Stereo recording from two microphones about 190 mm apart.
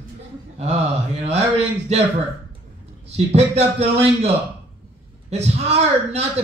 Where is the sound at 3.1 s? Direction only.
35° right (ahead or behind).